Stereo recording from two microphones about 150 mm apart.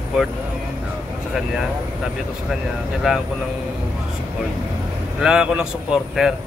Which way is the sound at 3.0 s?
Centre (ahead or behind).